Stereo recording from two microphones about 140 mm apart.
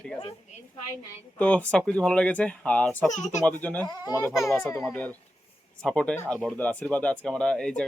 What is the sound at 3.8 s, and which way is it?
Speech, 25° left (ahead or behind).